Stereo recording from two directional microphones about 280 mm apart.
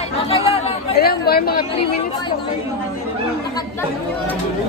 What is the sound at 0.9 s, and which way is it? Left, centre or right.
Speech, left.